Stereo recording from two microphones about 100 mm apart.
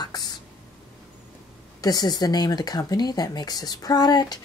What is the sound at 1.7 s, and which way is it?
Speech, 40° left (ahead or behind).